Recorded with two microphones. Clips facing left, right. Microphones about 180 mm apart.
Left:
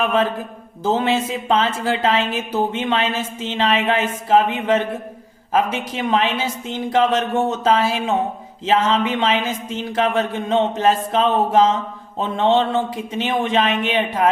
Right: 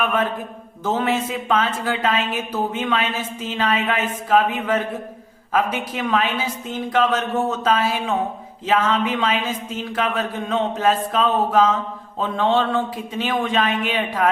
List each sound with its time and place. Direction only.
0.9 s speech: 30° left (ahead or behind)